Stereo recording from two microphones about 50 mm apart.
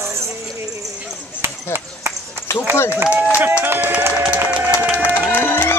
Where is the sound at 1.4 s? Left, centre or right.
Right.